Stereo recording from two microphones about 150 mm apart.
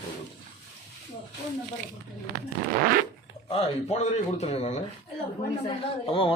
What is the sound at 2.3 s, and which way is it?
Speech, 90° right.